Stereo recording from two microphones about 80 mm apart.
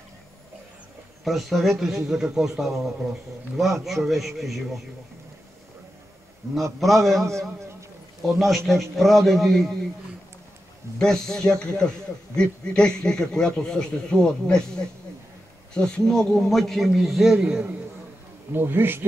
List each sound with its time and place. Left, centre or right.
1.2 s a man's voice: centre
6.8 s a man's voice: centre
11.0 s a man's voice: centre
17.4 s a man's voice: centre
18.5 s speech: right